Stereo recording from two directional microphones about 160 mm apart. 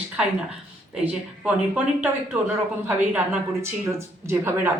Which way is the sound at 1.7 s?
10° right (ahead or behind).